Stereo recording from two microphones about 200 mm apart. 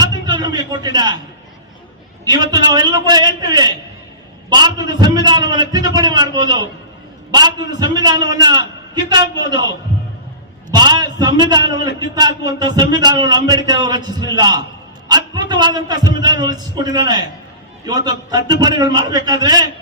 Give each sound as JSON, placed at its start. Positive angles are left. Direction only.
{"t": 0.0, "sound": "a sound", "side_deg": -20}
{"t": 2.2, "sound": "a man's voice", "side_deg": -20}
{"t": 10.7, "sound": "a man's voice", "side_deg": -20}